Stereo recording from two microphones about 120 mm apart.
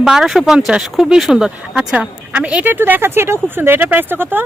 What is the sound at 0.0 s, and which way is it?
Speech, 5° right (ahead or behind).